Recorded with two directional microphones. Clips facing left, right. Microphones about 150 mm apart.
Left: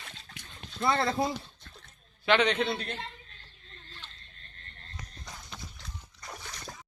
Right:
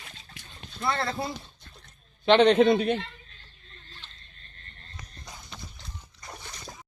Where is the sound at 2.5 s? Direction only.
45° right (ahead or behind).